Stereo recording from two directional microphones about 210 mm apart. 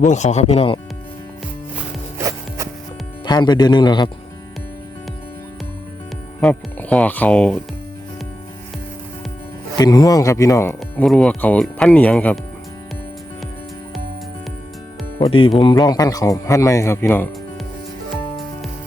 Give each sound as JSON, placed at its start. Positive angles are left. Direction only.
{"t": 0.0, "sound": "speech", "side_deg": 35}
{"t": 2.1, "sound": "music", "side_deg": -15}
{"t": 3.2, "sound": "speech", "side_deg": 20}
{"t": 6.4, "sound": "speech", "side_deg": 5}
{"t": 9.7, "sound": "speech", "side_deg": 15}
{"t": 15.2, "sound": "speech", "side_deg": 25}